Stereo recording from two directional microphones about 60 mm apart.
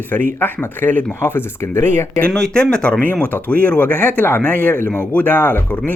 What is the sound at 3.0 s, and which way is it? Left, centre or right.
Speech, left.